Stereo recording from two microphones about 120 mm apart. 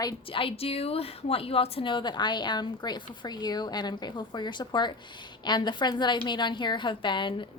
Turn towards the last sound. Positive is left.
turn(degrees=40)  # may be behind; listen again after turning